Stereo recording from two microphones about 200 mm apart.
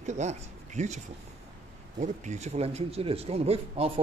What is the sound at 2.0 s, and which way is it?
Speech, 35° right (ahead or behind).